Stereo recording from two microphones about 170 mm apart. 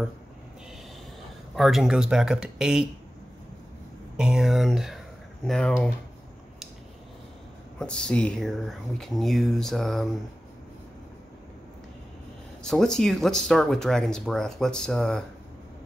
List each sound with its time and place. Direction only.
1.5 s speech: centre (ahead or behind)
4.2 s speech: 5° right (ahead or behind)
7.8 s speech: 5° left (ahead or behind)
12.6 s speech: centre (ahead or behind)